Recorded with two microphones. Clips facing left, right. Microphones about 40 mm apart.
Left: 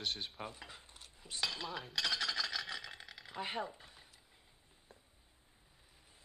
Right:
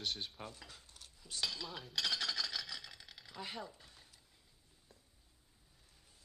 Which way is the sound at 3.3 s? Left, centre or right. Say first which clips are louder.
Left 6 dB; left.